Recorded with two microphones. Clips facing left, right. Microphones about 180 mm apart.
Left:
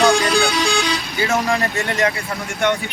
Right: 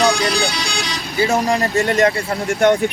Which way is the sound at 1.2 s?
35° right (ahead or behind).